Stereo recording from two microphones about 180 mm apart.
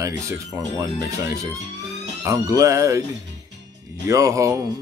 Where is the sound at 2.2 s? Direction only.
20° right (ahead or behind).